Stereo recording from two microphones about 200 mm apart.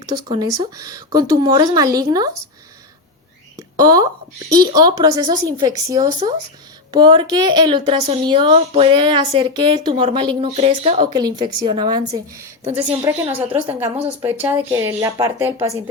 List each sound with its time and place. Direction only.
0.0 s a woman's voice: 20° right (ahead or behind)
3.8 s a woman's voice: 20° right (ahead or behind)
11.2 s a woman's voice: 20° right (ahead or behind)